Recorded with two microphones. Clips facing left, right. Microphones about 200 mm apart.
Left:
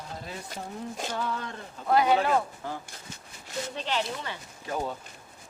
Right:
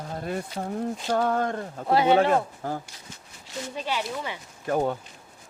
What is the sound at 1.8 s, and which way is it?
Speech, 25° right (ahead or behind).